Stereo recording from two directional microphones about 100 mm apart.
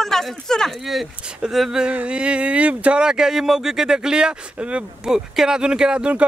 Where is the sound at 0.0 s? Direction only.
5° left (ahead or behind).